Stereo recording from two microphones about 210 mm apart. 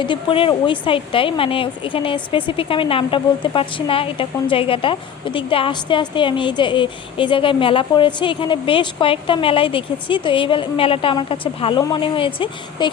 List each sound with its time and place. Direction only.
0.0 s speech: 25° left (ahead or behind)